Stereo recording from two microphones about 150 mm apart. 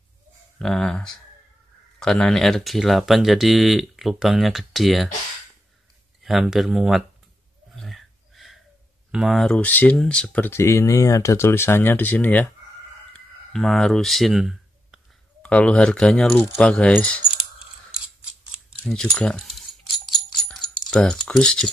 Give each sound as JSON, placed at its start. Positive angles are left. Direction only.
{"t": 0.6, "sound": "speech", "side_deg": 5}
{"t": 6.2, "sound": "speech", "side_deg": 0}
{"t": 7.7, "sound": "a sound", "side_deg": 0}
{"t": 9.1, "sound": "speech", "side_deg": 0}
{"t": 13.1, "sound": "a sound", "side_deg": 0}
{"t": 15.4, "sound": "speech", "side_deg": 10}
{"t": 16.3, "sound": "speech", "side_deg": 15}
{"t": 18.8, "sound": "keys jangling", "side_deg": 5}